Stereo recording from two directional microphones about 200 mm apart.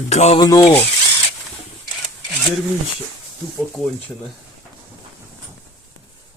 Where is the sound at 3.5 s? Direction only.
Centre (ahead or behind).